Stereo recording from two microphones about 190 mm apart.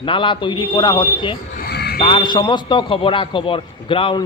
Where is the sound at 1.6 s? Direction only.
55° left (ahead or behind).